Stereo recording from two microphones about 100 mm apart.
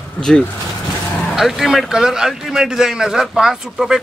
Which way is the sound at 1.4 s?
Centre (ahead or behind).